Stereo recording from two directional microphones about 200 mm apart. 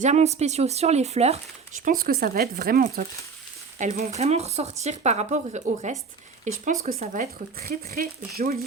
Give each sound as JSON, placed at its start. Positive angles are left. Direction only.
{"t": 0.0, "sound": "speech", "side_deg": -35}
{"t": 1.8, "sound": "speech", "side_deg": -45}
{"t": 3.8, "sound": "speech", "side_deg": -35}